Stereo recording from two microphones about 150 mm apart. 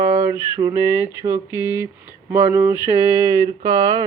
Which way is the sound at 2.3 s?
15° right (ahead or behind).